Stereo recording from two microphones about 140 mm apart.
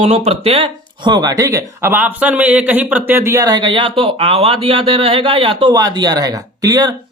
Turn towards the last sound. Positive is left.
turn(degrees=-25)  # may be behind; listen again after turning